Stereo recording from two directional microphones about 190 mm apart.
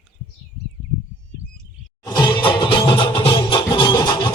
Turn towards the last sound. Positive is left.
turn(degrees=20)  # may be behind; listen again after turning